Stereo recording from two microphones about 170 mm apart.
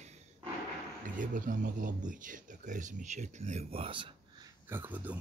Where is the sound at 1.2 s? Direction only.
50° right (ahead or behind); by 4.4 s 30° right (ahead or behind).